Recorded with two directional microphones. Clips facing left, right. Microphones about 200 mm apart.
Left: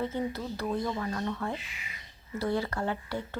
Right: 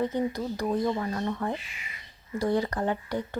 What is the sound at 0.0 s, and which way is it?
Speech, 15° right (ahead or behind).